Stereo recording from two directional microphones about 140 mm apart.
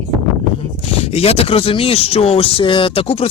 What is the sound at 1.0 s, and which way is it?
Speech, 45° left (ahead or behind).